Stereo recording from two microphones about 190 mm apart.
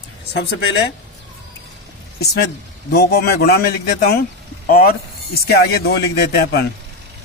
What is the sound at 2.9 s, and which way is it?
Speech, 55° left (ahead or behind).